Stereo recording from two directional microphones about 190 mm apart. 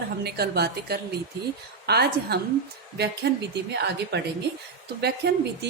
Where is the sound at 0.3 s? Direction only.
55° right (ahead or behind).